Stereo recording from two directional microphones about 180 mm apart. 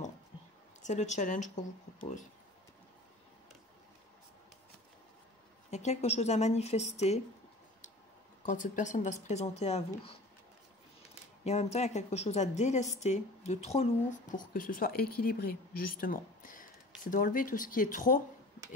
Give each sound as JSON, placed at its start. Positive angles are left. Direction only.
{"t": 0.8, "sound": "a woman's voice", "side_deg": 40}
{"t": 5.7, "sound": "a woman's voice", "side_deg": 40}
{"t": 8.5, "sound": "a woman's voice", "side_deg": 45}
{"t": 11.4, "sound": "a woman's voice", "side_deg": 35}
{"t": 14.5, "sound": "a woman's voice", "side_deg": 50}